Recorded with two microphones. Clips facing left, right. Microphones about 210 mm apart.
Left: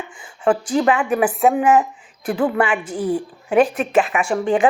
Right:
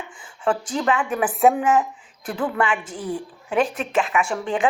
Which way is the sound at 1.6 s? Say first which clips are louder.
Left 4 dB; 10° left (ahead or behind).